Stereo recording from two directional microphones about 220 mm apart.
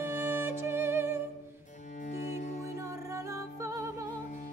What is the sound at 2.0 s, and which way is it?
Music, 35° left (ahead or behind).